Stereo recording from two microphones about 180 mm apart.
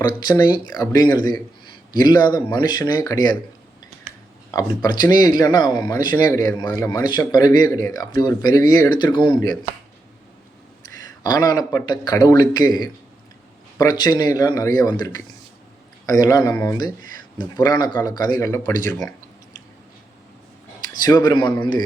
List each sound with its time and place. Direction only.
0.3 s speech: 25° left (ahead or behind)
4.5 s speech: 20° left (ahead or behind)
11.2 s speech: 20° left (ahead or behind)
13.7 s speech: 20° left (ahead or behind)
21.0 s speech: 25° left (ahead or behind)